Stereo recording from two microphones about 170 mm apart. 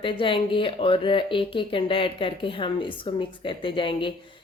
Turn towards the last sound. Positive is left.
turn(degrees=30)  # may be behind; listen again after turning